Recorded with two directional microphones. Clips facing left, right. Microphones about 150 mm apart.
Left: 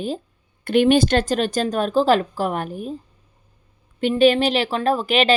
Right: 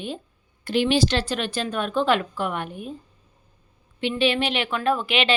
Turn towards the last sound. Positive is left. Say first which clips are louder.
# left 4 dB
turn(degrees=40)  # may be behind; listen again after turning